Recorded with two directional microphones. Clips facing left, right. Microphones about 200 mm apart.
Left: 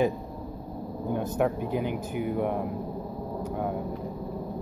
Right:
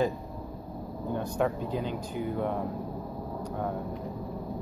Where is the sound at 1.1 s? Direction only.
15° left (ahead or behind).